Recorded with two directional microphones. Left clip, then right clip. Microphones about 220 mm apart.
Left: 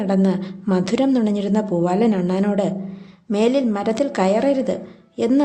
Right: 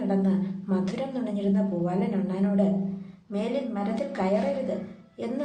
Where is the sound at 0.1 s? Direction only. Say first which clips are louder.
Left 8 dB; 50° left (ahead or behind).